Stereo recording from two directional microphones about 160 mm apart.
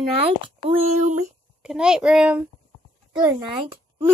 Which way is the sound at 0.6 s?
40° right (ahead or behind).